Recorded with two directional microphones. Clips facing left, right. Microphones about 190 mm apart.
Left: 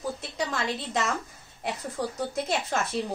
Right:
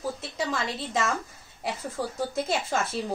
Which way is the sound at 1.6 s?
Centre (ahead or behind).